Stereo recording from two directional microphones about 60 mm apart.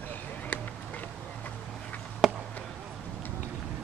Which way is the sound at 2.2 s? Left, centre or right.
Centre.